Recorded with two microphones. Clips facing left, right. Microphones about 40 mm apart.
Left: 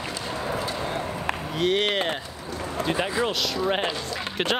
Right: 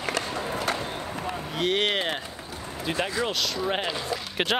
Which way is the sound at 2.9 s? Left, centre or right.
Centre.